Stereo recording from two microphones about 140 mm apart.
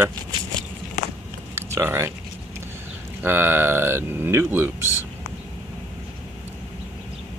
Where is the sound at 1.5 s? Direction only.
20° right (ahead or behind).